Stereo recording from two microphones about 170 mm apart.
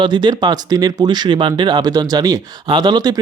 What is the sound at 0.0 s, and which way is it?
Speech, 25° right (ahead or behind).